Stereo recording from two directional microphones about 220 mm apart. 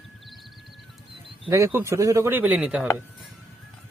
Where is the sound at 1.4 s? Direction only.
10° right (ahead or behind).